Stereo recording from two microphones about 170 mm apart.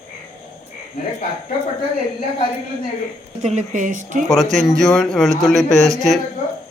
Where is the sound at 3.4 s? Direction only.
45° right (ahead or behind).